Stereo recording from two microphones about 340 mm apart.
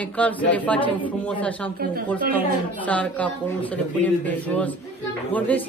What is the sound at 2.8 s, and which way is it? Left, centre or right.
Speech, centre.